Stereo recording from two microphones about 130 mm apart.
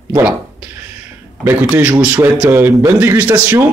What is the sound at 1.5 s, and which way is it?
Speech, 15° right (ahead or behind).